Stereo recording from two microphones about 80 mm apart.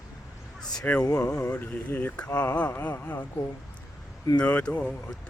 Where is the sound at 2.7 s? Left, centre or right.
Left.